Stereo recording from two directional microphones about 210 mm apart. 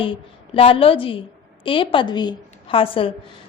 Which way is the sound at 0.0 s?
25° left (ahead or behind).